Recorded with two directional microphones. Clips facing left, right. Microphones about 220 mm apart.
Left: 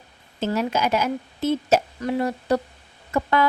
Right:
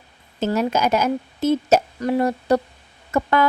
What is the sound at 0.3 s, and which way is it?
A woman's voice, 45° right (ahead or behind).